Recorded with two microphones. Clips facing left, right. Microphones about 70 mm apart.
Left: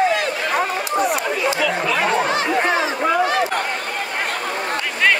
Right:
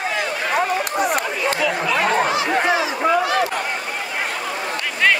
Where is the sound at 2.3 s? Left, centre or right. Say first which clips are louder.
Even; left.